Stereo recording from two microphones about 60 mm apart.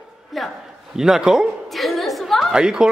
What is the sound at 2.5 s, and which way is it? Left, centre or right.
Speech, centre.